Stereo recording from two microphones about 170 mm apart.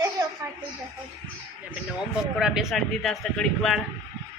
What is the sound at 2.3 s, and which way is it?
Speech, centre (ahead or behind).